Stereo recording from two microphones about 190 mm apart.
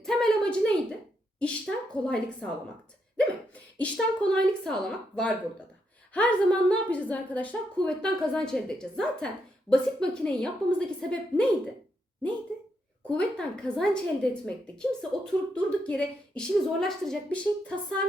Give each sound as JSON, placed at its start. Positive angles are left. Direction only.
{"t": 0.0, "sound": "a sound", "side_deg": 0}
{"t": 3.8, "sound": "a woman's voice", "side_deg": 5}
{"t": 13.1, "sound": "a woman's voice", "side_deg": 5}